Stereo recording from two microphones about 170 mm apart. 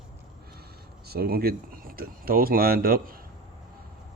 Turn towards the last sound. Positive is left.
turn(degrees=-60)  # may be behind; listen again after turning